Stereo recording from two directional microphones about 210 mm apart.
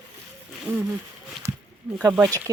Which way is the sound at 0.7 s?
10° right (ahead or behind).